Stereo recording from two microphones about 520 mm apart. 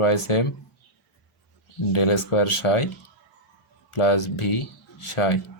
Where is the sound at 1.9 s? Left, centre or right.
Left.